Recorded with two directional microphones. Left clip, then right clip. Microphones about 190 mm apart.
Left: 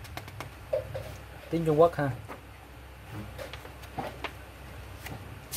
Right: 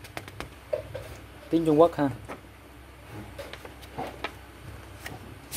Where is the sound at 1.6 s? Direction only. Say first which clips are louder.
Right 2 dB; 30° right (ahead or behind).